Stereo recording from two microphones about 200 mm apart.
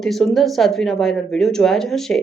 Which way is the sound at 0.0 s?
Centre (ahead or behind).